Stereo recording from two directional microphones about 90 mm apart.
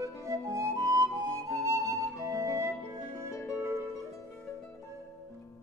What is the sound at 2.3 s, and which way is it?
Music, 35° right (ahead or behind).